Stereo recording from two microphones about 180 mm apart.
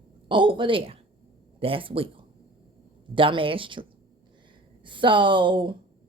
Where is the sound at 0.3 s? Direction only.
25° right (ahead or behind).